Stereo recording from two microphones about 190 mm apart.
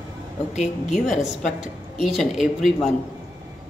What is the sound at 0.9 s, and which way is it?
A woman's voice, centre (ahead or behind).